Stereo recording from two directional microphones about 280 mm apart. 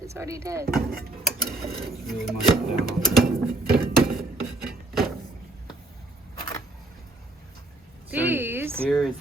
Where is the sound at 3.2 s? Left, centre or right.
Right.